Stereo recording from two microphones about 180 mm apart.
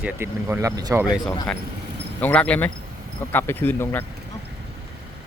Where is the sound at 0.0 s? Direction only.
10° right (ahead or behind).